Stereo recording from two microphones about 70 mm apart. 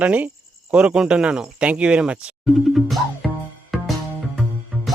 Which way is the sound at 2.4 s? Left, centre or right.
Centre.